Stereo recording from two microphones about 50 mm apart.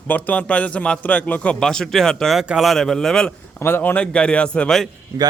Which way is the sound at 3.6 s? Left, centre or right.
Left.